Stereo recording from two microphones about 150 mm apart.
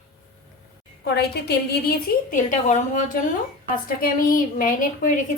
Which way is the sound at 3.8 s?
70° left (ahead or behind).